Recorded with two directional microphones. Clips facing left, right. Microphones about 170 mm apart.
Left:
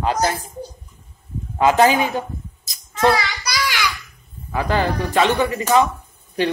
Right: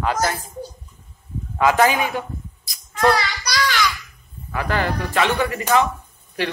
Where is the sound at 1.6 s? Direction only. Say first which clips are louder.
Left 2 dB; 30° left (ahead or behind).